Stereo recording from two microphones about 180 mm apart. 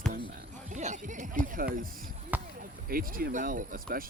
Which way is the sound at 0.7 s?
40° right (ahead or behind).